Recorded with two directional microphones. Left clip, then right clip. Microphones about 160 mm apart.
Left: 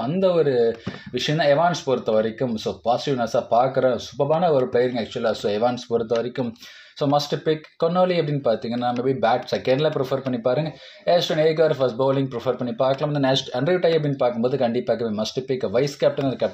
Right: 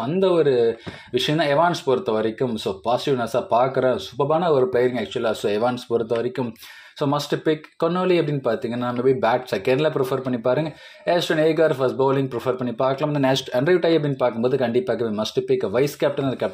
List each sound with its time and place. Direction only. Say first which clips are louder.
0.0 s speech: right 1 dB; 35° right (ahead or behind)